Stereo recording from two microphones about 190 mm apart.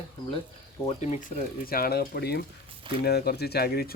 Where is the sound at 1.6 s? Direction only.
50° left (ahead or behind).